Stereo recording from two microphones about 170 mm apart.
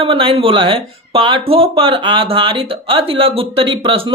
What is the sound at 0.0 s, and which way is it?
Speech, 30° right (ahead or behind).